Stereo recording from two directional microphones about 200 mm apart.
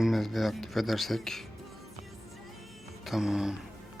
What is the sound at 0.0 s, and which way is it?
Speech, centre (ahead or behind).